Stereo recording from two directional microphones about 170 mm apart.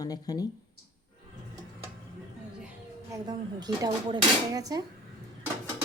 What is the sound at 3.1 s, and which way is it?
A woman's voice, 20° right (ahead or behind).